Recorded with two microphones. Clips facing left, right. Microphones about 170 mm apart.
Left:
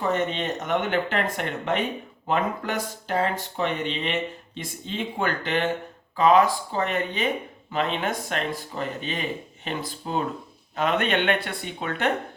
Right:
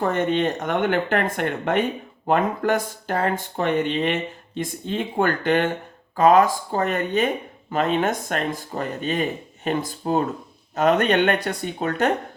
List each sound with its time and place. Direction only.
0.0 s speech: 50° right (ahead or behind)